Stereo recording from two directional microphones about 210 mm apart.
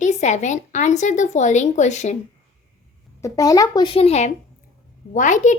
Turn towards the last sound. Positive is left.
turn(degrees=35)  # may be behind; listen again after turning